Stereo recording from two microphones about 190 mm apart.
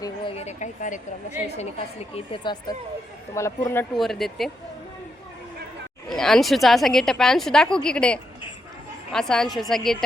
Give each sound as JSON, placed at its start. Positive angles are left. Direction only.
{"t": 0.0, "sound": "a woman's voice", "side_deg": 30}
{"t": 3.9, "sound": "a woman's voice", "side_deg": 0}
{"t": 6.1, "sound": "a woman's voice", "side_deg": 0}